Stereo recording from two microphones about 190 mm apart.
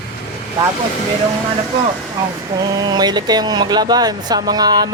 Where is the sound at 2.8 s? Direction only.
20° right (ahead or behind).